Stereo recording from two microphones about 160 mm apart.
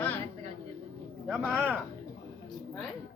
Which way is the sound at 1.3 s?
10° right (ahead or behind).